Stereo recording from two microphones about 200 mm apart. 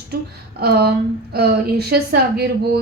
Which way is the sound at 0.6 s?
50° right (ahead or behind).